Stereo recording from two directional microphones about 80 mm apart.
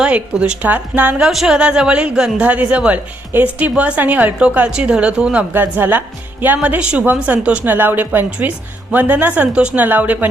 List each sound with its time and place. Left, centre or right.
0.0 s speech: centre
1.2 s a woman's voice: centre; by 10.2 s right